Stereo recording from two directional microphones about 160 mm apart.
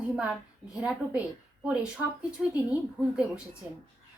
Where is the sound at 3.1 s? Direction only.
5° right (ahead or behind).